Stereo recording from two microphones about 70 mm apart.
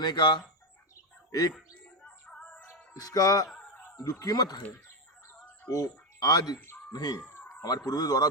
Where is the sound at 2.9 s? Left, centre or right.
Left.